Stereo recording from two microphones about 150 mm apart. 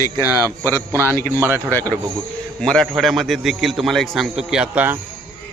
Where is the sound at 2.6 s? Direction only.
5° left (ahead or behind).